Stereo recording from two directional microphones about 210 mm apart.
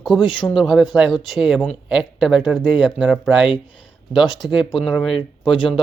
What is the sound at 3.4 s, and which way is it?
Speech, 25° left (ahead or behind).